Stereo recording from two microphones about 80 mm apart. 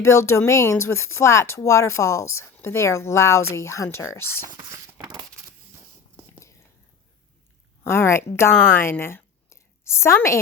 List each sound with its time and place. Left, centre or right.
0.0 s speech: left
4.7 s a sound: right
7.9 s a woman's voice: left